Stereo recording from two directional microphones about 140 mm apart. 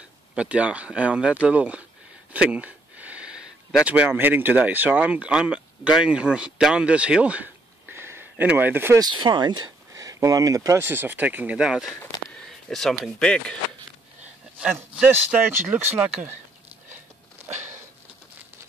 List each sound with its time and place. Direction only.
0.3 s speech: 10° right (ahead or behind)
7.9 s a sound: 15° right (ahead or behind)
9.0 s speech: 35° right (ahead or behind); by 13.6 s 5° left (ahead or behind)
15.0 s speech: 10° right (ahead or behind)